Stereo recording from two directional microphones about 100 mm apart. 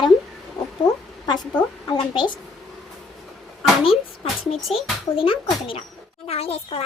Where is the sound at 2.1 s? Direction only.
50° left (ahead or behind).